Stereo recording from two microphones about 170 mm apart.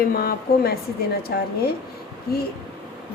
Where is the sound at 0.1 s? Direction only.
60° left (ahead or behind).